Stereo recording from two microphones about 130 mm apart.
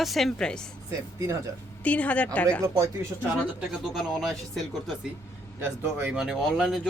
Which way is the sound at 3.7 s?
Centre (ahead or behind).